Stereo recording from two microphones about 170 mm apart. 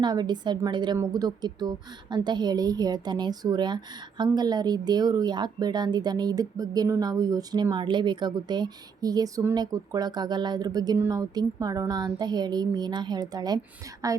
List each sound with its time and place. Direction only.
0.0 s a woman's voice: 25° right (ahead or behind)